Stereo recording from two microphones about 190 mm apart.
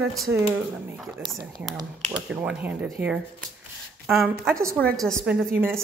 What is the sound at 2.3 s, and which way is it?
Speech, 5° right (ahead or behind).